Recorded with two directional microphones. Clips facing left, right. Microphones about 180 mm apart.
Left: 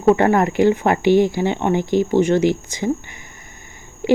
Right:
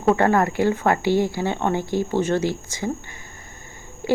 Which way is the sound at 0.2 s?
20° left (ahead or behind).